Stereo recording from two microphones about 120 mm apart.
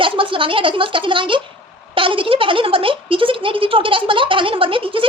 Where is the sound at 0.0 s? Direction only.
45° right (ahead or behind).